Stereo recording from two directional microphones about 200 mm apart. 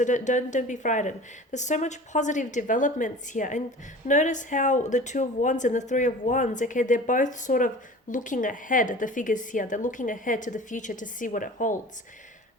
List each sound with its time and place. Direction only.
0.0 s a woman's voice: 40° left (ahead or behind)